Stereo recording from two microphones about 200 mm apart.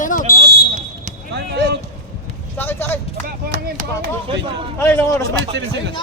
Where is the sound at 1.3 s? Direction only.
55° right (ahead or behind).